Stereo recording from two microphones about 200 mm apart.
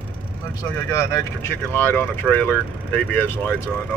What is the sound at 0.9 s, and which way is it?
Speech, 15° left (ahead or behind).